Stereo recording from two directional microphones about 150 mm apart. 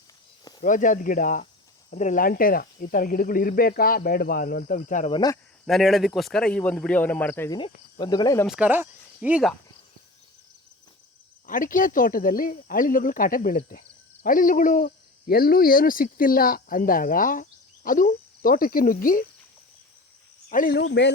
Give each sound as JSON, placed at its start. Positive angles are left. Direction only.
{"t": 0.6, "sound": "speech", "side_deg": 60}
{"t": 5.1, "sound": "cricket", "side_deg": 25}
{"t": 5.6, "sound": "a man's voice", "side_deg": 0}
{"t": 7.5, "sound": "cricket", "side_deg": 30}
{"t": 8.4, "sound": "speech", "side_deg": -10}
{"t": 11.4, "sound": "speech", "side_deg": 60}
{"t": 14.2, "sound": "speech", "side_deg": 70}
{"t": 20.5, "sound": "speech", "side_deg": 70}